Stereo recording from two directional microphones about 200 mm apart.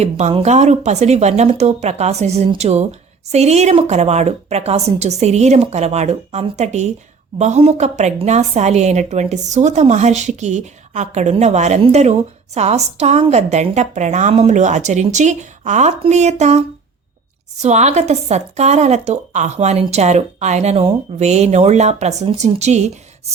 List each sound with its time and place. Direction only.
0.0 s a woman's voice: 30° right (ahead or behind)